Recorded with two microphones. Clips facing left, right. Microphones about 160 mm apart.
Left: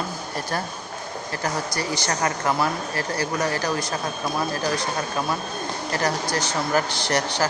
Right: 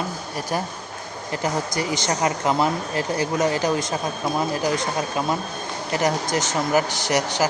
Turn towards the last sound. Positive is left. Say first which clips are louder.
# right 2 dB
turn(degrees=-15)  # may be behind; listen again after turning